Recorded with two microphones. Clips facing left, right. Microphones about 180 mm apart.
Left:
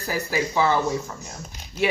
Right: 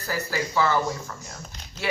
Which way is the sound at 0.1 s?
15° left (ahead or behind).